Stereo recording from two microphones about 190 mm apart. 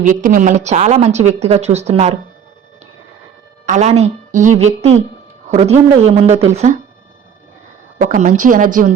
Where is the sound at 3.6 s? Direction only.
40° right (ahead or behind).